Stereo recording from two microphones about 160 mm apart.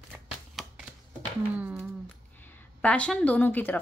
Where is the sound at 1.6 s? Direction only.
10° right (ahead or behind).